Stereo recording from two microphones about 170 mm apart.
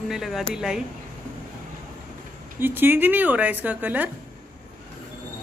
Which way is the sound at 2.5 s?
10° right (ahead or behind).